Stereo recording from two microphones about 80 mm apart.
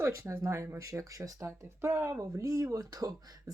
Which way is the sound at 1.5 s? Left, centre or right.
Right.